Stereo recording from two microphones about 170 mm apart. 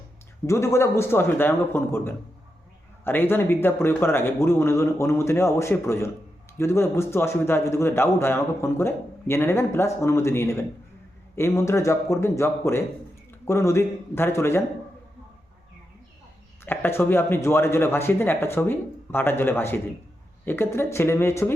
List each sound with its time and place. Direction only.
0.4 s a man's voice: 15° left (ahead or behind)
16.6 s a man's voice: 10° left (ahead or behind)